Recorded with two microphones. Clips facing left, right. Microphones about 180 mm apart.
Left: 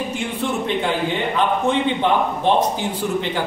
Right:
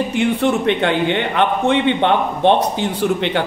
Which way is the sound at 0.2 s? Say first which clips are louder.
Right 11 dB; 70° right (ahead or behind).